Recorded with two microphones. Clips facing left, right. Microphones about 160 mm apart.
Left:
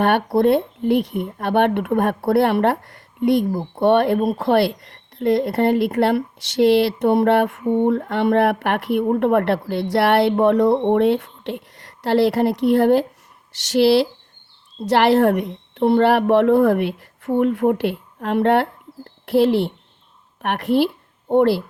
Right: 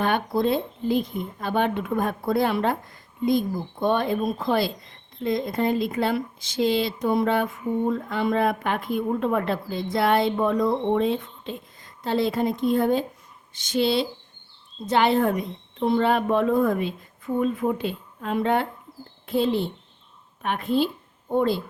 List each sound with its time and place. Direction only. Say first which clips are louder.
0.0 s a woman's voice: left 6 dB; 65° left (ahead or behind)